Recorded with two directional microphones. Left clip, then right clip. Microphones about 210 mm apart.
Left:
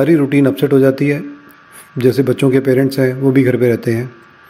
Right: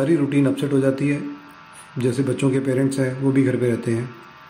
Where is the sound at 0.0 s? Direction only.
35° left (ahead or behind).